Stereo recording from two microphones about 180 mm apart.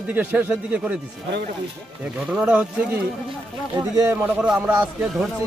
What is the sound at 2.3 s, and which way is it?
Speech, 5° right (ahead or behind).